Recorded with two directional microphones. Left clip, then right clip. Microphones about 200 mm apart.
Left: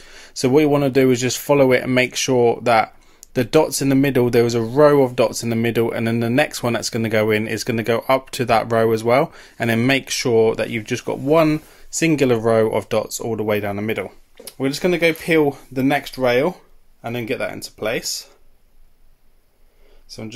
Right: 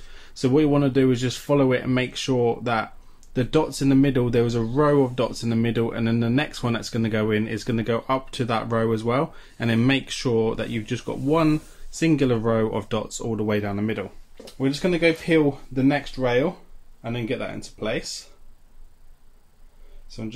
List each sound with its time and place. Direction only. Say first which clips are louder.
0.1 s speech: left 5 dB; 40° left (ahead or behind)
14.6 s speech: left 4 dB; 45° left (ahead or behind)
20.1 s speech: left 2 dB; 50° left (ahead or behind)